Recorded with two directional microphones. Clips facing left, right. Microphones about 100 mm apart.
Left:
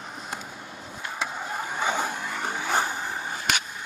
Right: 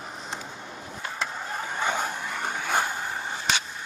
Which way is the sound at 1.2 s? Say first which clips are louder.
Left 1 dB; 10° left (ahead or behind).